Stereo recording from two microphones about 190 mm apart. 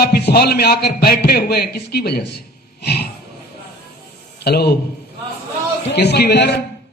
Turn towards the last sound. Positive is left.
turn(degrees=60)  # may be behind; listen again after turning